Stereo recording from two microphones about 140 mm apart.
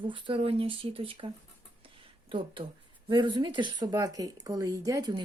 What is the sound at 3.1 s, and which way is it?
A woman's voice, 35° right (ahead or behind).